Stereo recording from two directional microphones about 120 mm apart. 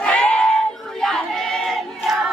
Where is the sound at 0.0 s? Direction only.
10° left (ahead or behind).